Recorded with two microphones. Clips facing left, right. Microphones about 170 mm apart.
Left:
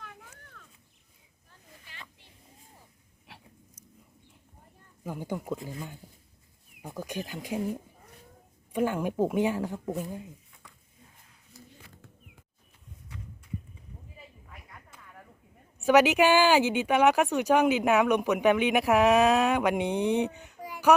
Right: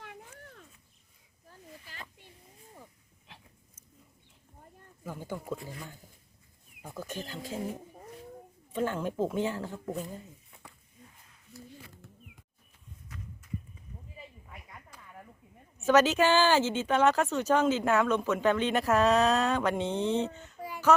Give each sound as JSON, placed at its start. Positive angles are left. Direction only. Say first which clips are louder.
{"t": 1.9, "sound": "a sound", "louder": "right 2 dB", "side_deg": -40}
{"t": 5.0, "sound": "speech", "louder": "left 3 dB", "side_deg": 15}
{"t": 8.7, "sound": "speech", "louder": "left 3 dB", "side_deg": 10}
{"t": 15.8, "sound": "speech", "louder": "left 3 dB", "side_deg": 15}